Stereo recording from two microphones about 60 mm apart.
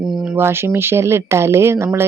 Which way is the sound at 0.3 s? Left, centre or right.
Right.